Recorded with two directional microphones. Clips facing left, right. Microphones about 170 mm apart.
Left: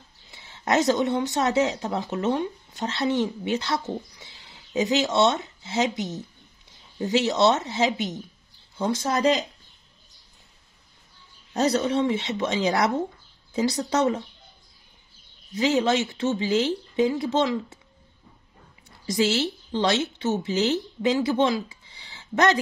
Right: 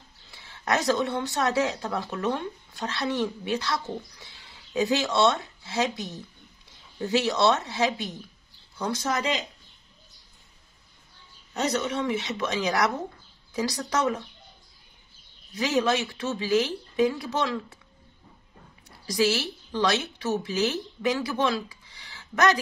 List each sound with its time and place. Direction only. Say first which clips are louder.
0.3 s speech: left 3 dB; 25° left (ahead or behind)
11.5 s speech: left 5 dB; 35° left (ahead or behind)
15.6 s speech: left 3 dB; 25° left (ahead or behind)
19.0 s a woman's voice: left 2 dB; 25° left (ahead or behind)